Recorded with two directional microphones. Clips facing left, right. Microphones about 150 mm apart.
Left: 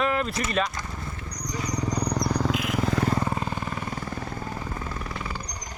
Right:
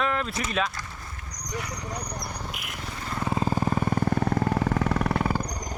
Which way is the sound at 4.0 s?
70° right (ahead or behind).